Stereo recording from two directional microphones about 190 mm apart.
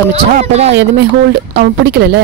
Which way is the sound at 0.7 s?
65° right (ahead or behind).